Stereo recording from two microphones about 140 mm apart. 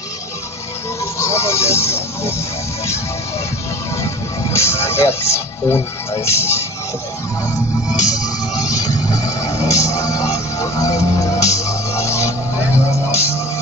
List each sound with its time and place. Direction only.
1.2 s music: 20° left (ahead or behind)
4.0 s music: 20° left (ahead or behind)
6.2 s speech: 20° left (ahead or behind)
8.1 s music: 25° left (ahead or behind)